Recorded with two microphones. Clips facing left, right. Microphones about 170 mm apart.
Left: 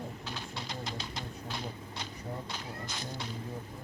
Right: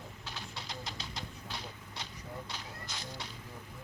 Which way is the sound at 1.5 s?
50° left (ahead or behind).